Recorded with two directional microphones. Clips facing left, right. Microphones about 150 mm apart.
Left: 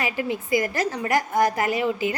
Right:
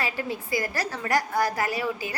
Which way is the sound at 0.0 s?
15° left (ahead or behind).